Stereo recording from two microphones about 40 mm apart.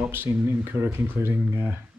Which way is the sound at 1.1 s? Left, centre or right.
Right.